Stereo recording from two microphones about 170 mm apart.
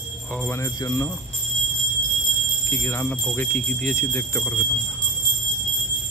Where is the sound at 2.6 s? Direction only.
15° left (ahead or behind).